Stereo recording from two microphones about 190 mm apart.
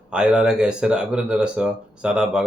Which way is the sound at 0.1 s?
5° right (ahead or behind).